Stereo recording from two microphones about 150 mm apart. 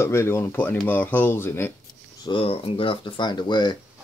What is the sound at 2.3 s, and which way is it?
Speech, 40° left (ahead or behind).